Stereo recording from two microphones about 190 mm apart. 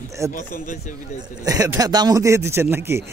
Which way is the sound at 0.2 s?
15° right (ahead or behind).